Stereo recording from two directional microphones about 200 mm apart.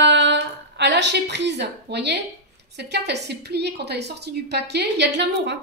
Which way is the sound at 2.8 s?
55° right (ahead or behind).